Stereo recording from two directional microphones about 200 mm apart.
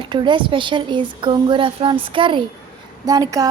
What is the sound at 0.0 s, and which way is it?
A woman's voice, 25° right (ahead or behind).